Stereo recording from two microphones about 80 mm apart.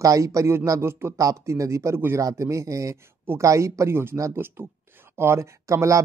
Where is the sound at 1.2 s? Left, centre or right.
Right.